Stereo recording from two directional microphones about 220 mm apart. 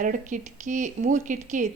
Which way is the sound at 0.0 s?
35° right (ahead or behind).